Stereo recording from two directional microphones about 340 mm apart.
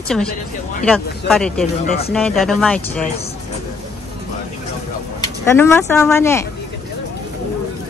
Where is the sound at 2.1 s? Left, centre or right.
Centre.